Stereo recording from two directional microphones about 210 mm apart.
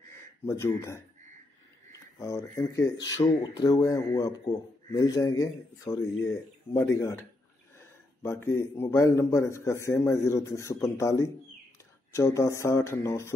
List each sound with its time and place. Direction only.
0.5 s speech: 10° left (ahead or behind)
8.2 s speech: 10° left (ahead or behind)